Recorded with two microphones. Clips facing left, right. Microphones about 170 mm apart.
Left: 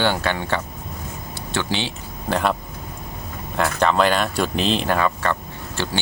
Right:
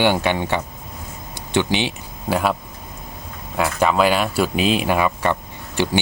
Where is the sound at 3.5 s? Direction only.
5° right (ahead or behind).